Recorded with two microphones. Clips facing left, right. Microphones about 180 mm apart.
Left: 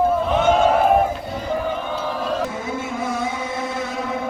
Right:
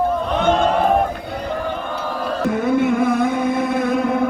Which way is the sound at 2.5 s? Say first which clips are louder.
Right 10 dB; 60° right (ahead or behind).